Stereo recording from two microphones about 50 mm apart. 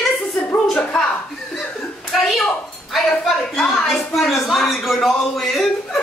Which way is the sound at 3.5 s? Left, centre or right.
Centre.